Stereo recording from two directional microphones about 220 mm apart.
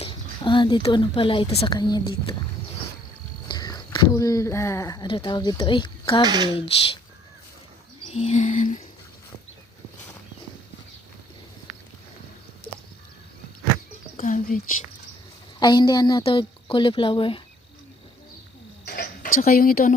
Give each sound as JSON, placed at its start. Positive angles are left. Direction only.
{"t": 0.0, "sound": "speech", "side_deg": 25}
{"t": 3.5, "sound": "speech", "side_deg": 20}
{"t": 6.2, "sound": "speech", "side_deg": -20}
{"t": 6.6, "sound": "a woman's voice", "side_deg": 25}
{"t": 8.1, "sound": "a sound", "side_deg": 30}
{"t": 14.2, "sound": "a sound", "side_deg": 35}
{"t": 15.6, "sound": "a woman's voice", "side_deg": 20}
{"t": 18.9, "sound": "cricket", "side_deg": 45}
{"t": 19.4, "sound": "a sound", "side_deg": 40}